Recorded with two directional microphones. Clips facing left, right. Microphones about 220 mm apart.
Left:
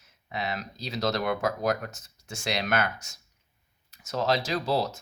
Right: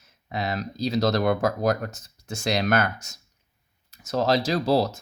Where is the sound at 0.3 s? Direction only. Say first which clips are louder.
Right 4 dB; 40° right (ahead or behind).